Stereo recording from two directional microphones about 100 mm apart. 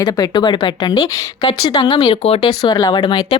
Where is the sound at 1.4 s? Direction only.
50° left (ahead or behind).